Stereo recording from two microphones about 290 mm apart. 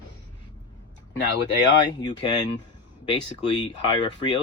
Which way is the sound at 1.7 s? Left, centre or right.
Centre.